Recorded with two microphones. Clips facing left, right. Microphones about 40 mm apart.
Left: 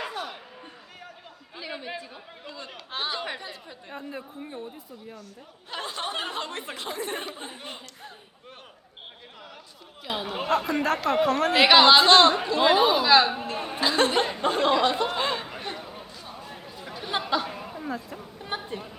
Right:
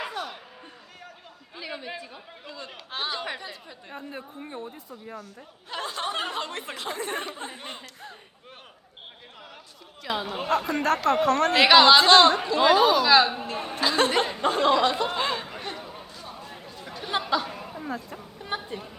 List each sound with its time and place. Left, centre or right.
0.0 s a sound: centre
1.5 s speech: centre
5.8 s a sound: centre
6.7 s speech: centre
7.3 s speech: right
10.0 s speech: centre
12.5 s speech: centre
13.1 s speech: centre
14.5 s a sound: centre